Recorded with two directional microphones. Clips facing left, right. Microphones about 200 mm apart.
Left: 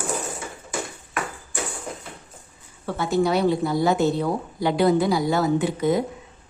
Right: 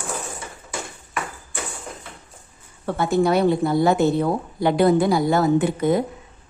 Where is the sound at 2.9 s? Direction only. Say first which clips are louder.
Right 2 dB; 55° right (ahead or behind).